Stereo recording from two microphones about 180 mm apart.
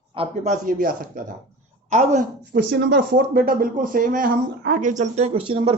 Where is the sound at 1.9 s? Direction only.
40° right (ahead or behind).